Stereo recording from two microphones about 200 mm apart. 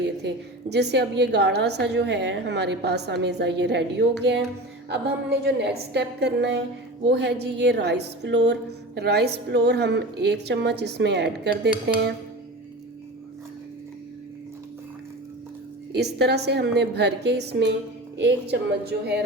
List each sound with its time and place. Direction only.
0.0 s a woman's voice: 55° right (ahead or behind)
16.0 s a woman's voice: 55° right (ahead or behind)
18.9 s a woman's voice: 55° right (ahead or behind)